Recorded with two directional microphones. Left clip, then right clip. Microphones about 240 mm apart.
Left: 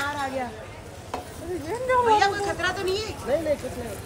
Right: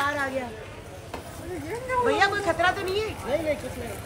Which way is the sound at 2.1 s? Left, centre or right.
Centre.